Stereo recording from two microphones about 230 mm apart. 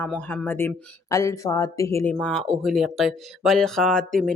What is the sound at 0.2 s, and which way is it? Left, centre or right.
Speech, centre.